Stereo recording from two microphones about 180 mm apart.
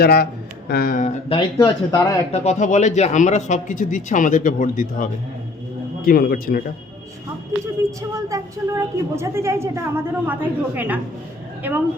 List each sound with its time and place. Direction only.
0.0 s speech: 60° left (ahead or behind)
1.3 s speech: 25° left (ahead or behind)
2.3 s speech: 35° left (ahead or behind); by 6.6 s 55° left (ahead or behind)
7.6 s a woman's voice: 15° right (ahead or behind)